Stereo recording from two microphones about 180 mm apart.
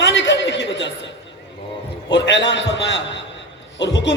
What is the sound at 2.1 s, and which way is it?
A man's voice, 90° left.